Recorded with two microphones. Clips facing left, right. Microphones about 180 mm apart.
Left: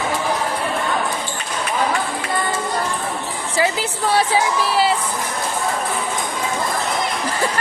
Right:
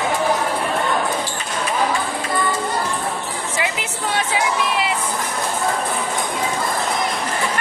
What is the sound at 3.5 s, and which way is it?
Music, 35° left (ahead or behind).